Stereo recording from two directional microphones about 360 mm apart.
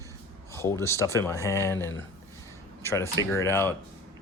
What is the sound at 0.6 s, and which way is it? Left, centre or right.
Speech, centre.